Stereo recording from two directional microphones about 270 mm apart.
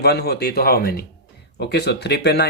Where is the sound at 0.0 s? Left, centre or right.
Left.